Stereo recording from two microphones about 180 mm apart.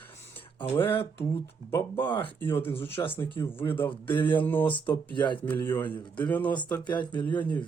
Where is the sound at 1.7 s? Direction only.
15° left (ahead or behind).